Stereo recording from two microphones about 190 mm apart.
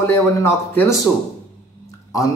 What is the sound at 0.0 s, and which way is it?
A man's voice, 15° left (ahead or behind).